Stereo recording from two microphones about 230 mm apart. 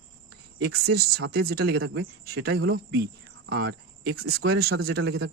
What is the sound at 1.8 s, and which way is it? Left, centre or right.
Speech, right.